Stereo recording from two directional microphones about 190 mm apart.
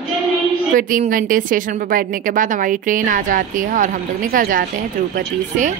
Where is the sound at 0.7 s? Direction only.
45° right (ahead or behind).